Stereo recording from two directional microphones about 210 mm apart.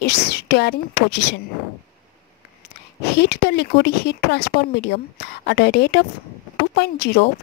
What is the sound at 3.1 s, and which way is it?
Speech, 50° left (ahead or behind).